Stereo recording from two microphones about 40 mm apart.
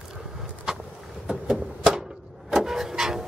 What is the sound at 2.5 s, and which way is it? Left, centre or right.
Vehicle, centre.